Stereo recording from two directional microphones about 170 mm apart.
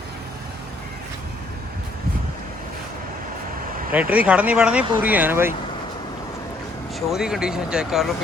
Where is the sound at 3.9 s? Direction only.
10° right (ahead or behind).